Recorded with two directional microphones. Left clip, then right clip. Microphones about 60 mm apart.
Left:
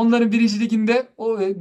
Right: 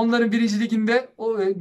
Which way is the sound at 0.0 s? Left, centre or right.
Left.